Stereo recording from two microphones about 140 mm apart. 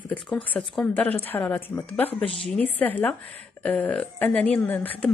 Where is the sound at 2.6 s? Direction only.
10° left (ahead or behind).